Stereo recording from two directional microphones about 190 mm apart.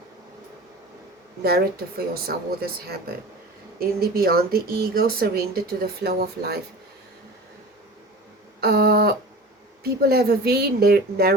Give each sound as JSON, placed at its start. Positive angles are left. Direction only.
{"t": 1.5, "sound": "a woman's voice", "side_deg": -55}
{"t": 8.6, "sound": "a sound", "side_deg": -55}
{"t": 9.8, "sound": "a woman's voice", "side_deg": -55}